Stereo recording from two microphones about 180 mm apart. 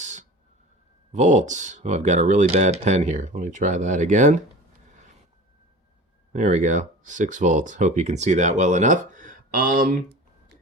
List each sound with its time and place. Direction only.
0.0 s a sound: 40° right (ahead or behind)
1.1 s speech: 40° right (ahead or behind)
6.3 s speech: 40° right (ahead or behind); by 10.6 s 60° right (ahead or behind)